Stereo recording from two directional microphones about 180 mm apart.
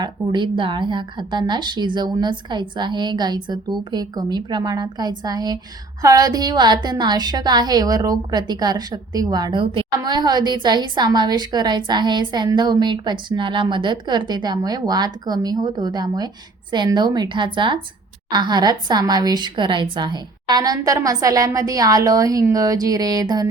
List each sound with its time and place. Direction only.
0.0 s a woman's voice: 25° right (ahead or behind)